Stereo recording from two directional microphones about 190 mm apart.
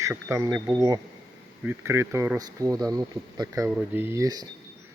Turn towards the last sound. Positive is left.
turn(degrees=-20)  # may be behind; listen again after turning